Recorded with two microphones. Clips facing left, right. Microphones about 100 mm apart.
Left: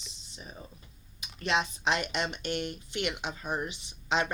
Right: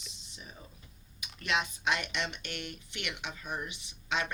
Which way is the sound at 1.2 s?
30° left (ahead or behind).